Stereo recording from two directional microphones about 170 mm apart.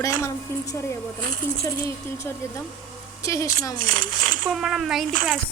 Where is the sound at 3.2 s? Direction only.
20° left (ahead or behind).